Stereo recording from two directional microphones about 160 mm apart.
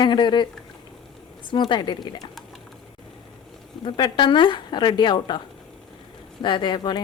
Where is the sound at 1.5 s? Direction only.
30° left (ahead or behind).